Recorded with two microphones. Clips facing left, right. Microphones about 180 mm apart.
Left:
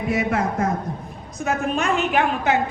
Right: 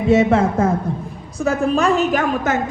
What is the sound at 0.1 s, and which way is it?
A woman's voice, 25° right (ahead or behind).